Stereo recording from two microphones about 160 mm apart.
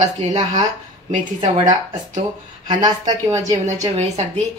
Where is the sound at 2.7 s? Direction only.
25° right (ahead or behind).